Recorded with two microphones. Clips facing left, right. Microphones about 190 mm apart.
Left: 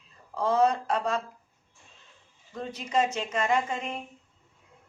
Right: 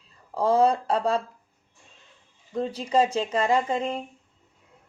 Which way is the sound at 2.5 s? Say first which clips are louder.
Right 5 dB; 30° right (ahead or behind).